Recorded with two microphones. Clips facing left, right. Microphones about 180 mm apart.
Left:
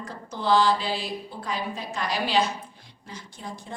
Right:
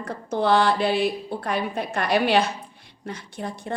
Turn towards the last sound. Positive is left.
turn(degrees=-65)  # may be behind; listen again after turning